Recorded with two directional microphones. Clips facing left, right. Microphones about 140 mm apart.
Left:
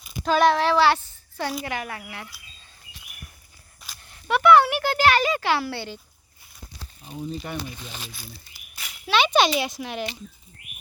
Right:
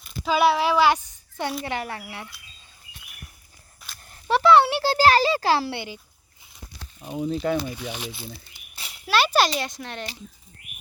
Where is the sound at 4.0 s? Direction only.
35° right (ahead or behind).